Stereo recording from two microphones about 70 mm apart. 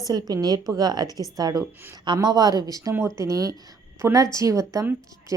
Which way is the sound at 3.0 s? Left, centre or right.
Right.